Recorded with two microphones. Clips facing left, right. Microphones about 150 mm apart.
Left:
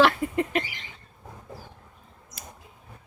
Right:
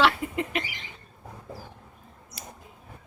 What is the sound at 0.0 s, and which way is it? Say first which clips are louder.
Rodents: left 3 dB; 40° left (ahead or behind).